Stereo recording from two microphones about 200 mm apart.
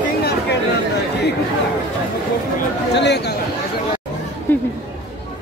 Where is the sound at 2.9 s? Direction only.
60° left (ahead or behind).